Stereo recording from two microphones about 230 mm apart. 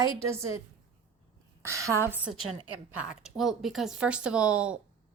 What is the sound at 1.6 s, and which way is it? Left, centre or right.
A woman's voice, centre.